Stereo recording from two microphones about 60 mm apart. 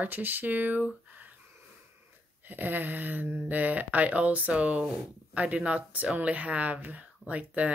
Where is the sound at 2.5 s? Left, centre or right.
Right.